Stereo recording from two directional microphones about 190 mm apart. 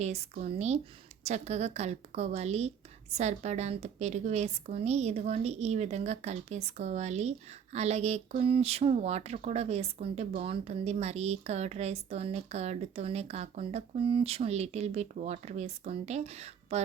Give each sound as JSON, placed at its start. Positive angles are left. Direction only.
{"t": 0.0, "sound": "a woman's voice", "side_deg": -35}